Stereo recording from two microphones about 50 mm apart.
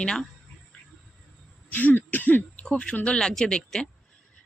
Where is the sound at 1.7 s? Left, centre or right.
Left.